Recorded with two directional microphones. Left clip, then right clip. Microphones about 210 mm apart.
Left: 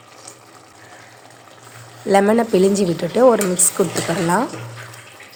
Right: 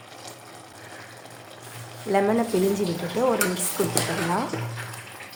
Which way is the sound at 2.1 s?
40° left (ahead or behind).